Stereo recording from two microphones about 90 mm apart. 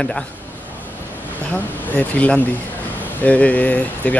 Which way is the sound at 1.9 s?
15° left (ahead or behind).